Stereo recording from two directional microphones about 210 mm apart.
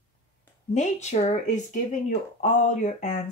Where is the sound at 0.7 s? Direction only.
35° left (ahead or behind).